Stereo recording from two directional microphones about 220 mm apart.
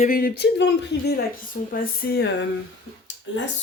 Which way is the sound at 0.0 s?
40° left (ahead or behind).